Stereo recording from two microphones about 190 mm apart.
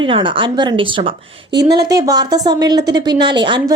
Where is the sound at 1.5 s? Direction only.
60° right (ahead or behind).